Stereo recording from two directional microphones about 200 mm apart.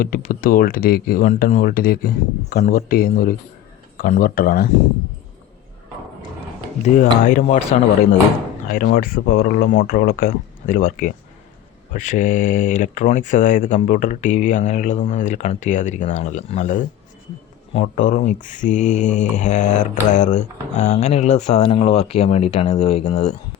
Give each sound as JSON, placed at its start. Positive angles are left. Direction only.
{"t": 0.0, "sound": "speech", "side_deg": 45}
{"t": 6.8, "sound": "mantra", "side_deg": 40}
{"t": 8.6, "sound": "speech", "side_deg": 45}
{"t": 11.9, "sound": "mantra", "side_deg": 40}